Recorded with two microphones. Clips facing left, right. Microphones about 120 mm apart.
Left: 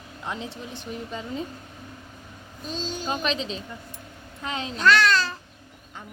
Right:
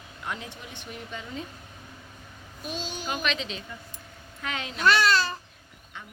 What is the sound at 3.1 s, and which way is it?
Speech, 35° left (ahead or behind).